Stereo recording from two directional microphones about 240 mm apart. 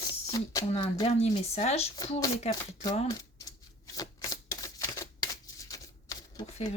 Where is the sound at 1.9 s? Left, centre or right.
Centre.